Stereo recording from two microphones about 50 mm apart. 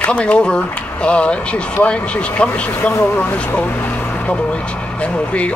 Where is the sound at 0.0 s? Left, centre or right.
Left.